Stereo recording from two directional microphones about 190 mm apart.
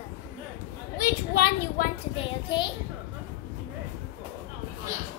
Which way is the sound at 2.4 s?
25° left (ahead or behind).